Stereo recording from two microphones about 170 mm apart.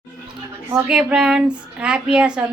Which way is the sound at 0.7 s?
5° right (ahead or behind).